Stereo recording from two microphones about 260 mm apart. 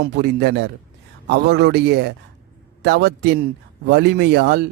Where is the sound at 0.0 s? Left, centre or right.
Right.